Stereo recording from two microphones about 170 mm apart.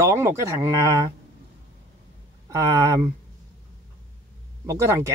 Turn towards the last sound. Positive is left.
turn(degrees=-20)  # may be behind; listen again after turning